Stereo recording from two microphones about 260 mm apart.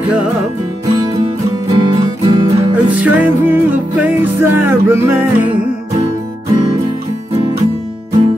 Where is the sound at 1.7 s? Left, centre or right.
Centre.